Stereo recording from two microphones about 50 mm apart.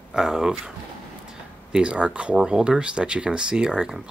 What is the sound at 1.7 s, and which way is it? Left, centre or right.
Speech, centre.